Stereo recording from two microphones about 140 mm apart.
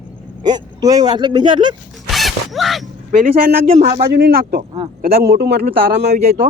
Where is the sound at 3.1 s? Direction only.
80° right.